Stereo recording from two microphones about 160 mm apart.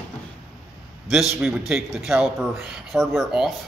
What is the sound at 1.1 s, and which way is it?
Speech, centre (ahead or behind).